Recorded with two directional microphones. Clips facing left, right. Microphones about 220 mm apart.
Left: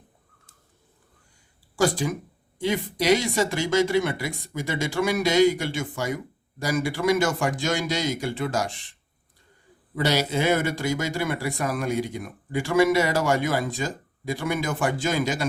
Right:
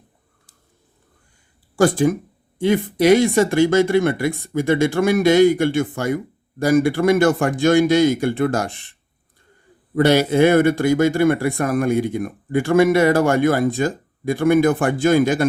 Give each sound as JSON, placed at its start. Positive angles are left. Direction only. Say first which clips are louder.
{"t": 1.7, "sound": "speech", "louder": "right 7 dB", "side_deg": -55}